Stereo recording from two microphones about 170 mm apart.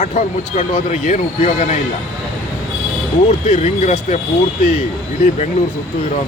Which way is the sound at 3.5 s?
40° left (ahead or behind).